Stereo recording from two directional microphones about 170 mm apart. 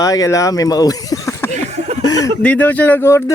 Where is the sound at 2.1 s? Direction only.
20° left (ahead or behind).